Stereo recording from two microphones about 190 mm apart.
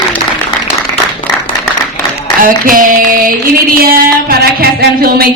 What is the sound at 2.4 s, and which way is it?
Singing, 45° right (ahead or behind).